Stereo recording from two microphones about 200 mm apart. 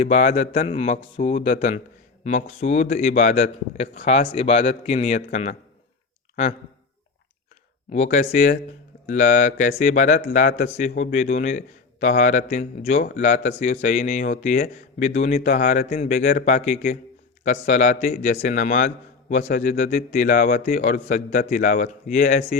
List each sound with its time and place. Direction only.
0.0 s speech: 35° left (ahead or behind)
7.9 s speech: 35° left (ahead or behind)